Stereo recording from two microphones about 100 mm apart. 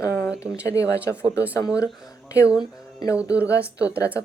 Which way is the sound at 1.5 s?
35° left (ahead or behind).